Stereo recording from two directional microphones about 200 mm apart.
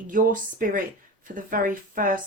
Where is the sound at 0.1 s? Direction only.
40° right (ahead or behind).